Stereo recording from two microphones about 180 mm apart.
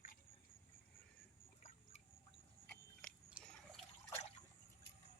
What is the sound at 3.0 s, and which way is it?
Biting, 5° left (ahead or behind).